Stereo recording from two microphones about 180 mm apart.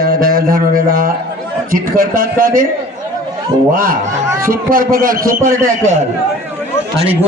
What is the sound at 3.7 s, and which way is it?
A man's voice, 50° right (ahead or behind).